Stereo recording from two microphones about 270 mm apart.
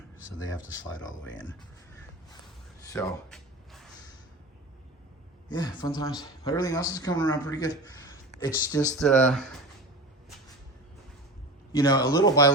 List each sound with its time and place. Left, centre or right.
0.3 s speech: left
1.2 s speech: centre
2.9 s a sound: centre
5.5 s speech: centre
9.0 s speech: centre
11.7 s speech: centre